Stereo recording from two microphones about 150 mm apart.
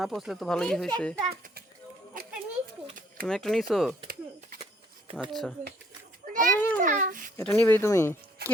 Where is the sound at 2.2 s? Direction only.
65° right (ahead or behind).